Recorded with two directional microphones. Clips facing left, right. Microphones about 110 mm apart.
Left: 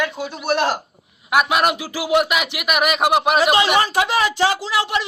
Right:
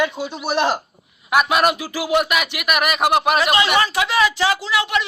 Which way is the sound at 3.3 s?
35° left (ahead or behind).